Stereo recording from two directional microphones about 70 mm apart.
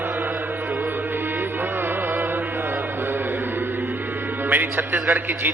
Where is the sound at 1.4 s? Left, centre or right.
Right.